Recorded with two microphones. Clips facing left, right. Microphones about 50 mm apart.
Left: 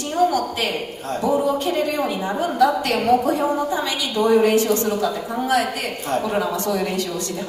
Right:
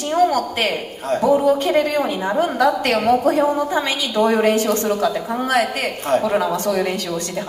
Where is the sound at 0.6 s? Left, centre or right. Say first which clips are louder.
Right 3 dB; right.